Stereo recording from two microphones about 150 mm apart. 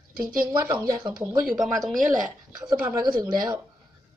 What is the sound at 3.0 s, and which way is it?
Speech, 25° right (ahead or behind).